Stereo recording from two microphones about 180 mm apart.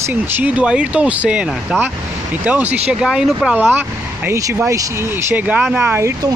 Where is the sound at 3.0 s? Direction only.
5° right (ahead or behind).